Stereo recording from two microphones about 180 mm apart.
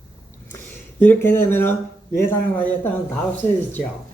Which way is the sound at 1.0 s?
10° left (ahead or behind).